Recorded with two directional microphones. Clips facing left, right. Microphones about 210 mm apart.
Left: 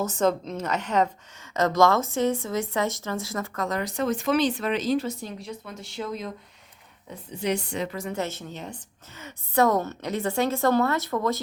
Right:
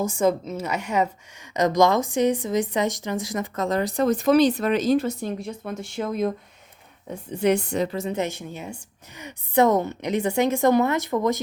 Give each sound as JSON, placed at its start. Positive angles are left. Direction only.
{"t": 0.0, "sound": "a woman's voice", "side_deg": -10}
{"t": 7.9, "sound": "a woman's voice", "side_deg": -25}